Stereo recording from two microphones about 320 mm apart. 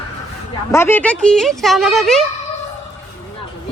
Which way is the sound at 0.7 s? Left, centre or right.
Centre.